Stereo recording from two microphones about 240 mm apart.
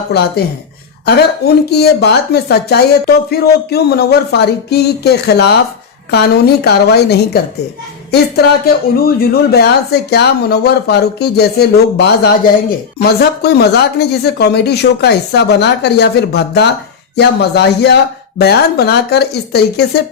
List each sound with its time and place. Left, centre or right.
0.1 s speech: left
9.0 s speech: left